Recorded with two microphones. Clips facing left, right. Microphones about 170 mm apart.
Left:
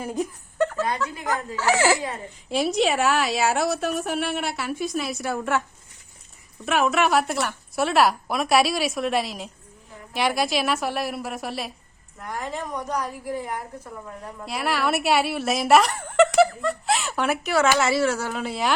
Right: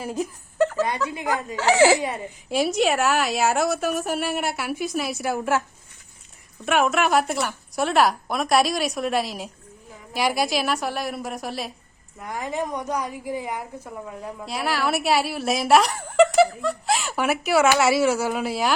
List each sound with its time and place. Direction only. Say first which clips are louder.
0.0 s a woman's voice: even; 5° right (ahead or behind)
0.9 s speech: right 1 dB; 15° right (ahead or behind)
2.5 s a woman's voice: right 1 dB; centre (ahead or behind)
6.7 s a woman's voice: right 1 dB; centre (ahead or behind)
12.2 s speech: right 3 dB; 10° right (ahead or behind)
14.2 s a woman's voice: even; centre (ahead or behind)